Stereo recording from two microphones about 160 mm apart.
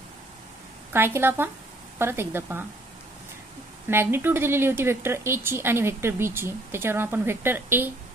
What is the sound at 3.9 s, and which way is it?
Speech, 15° right (ahead or behind).